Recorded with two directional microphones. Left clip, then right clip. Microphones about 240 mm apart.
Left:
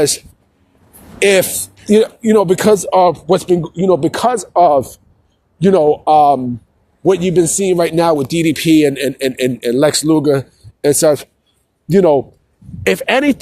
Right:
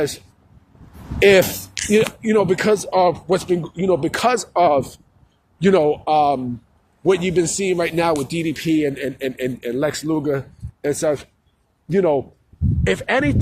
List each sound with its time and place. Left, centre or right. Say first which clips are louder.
1.2 s a man's voice: left 1 dB; left